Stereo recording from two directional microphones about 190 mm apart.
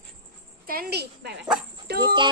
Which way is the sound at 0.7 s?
55° right (ahead or behind).